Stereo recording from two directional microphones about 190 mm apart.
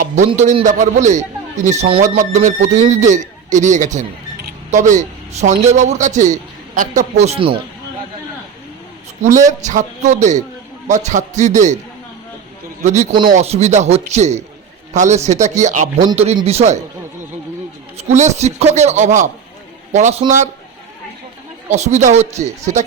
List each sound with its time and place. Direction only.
0.3 s a man's voice: 35° right (ahead or behind)
9.5 s a man's voice: 40° right (ahead or behind)
12.8 s a man's voice: 35° right (ahead or behind)
17.9 s a man's voice: 35° right (ahead or behind)
21.7 s a man's voice: 35° right (ahead or behind)